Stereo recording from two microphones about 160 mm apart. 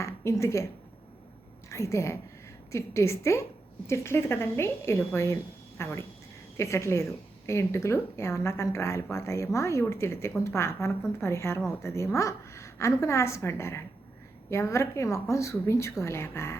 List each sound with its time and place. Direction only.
0.0 s speech: 15° left (ahead or behind)
1.7 s a woman's voice: 20° left (ahead or behind)